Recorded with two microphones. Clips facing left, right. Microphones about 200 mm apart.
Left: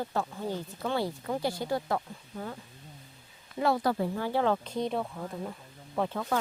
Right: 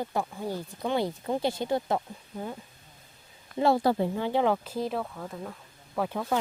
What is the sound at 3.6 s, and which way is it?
Speech, 25° right (ahead or behind).